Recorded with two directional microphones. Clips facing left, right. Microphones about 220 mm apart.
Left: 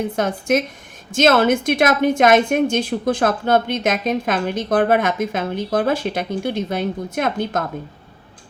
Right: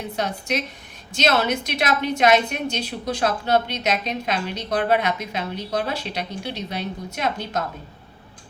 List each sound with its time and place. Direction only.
0.0 s a woman's voice: 50° left (ahead or behind)